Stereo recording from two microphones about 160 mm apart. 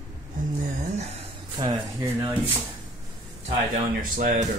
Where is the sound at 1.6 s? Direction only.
25° right (ahead or behind).